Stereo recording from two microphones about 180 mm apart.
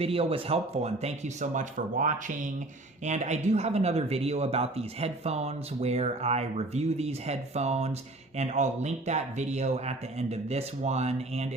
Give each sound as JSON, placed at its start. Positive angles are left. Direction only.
{"t": 0.0, "sound": "speech", "side_deg": -35}